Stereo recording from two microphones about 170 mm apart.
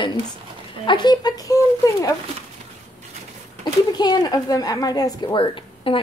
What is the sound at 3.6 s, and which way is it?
Speech, 25° left (ahead or behind).